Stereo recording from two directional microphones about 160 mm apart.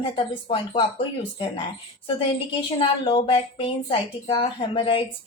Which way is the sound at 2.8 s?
35° left (ahead or behind).